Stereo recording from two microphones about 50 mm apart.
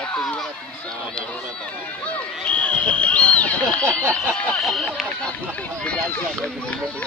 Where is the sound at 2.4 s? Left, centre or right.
Left.